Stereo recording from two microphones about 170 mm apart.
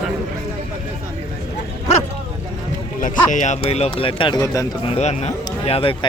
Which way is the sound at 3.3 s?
45° left (ahead or behind).